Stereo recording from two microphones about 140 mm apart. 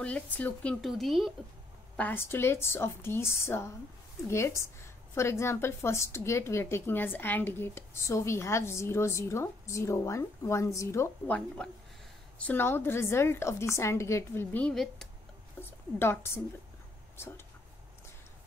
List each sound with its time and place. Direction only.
0.0 s a woman's voice: 10° left (ahead or behind)
0.7 s speech: centre (ahead or behind)
2.0 s a woman's voice: 15° left (ahead or behind)
11.3 s a woman's voice: 10° left (ahead or behind)
15.6 s speech: 15° left (ahead or behind)